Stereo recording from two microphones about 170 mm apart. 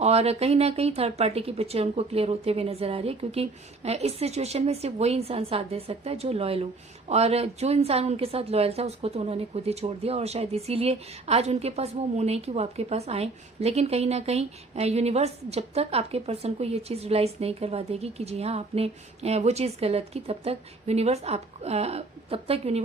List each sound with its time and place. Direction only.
0.0 s a woman's voice: 40° right (ahead or behind)